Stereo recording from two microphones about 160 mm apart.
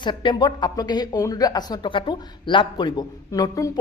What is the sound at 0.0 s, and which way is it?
Speech, 30° left (ahead or behind).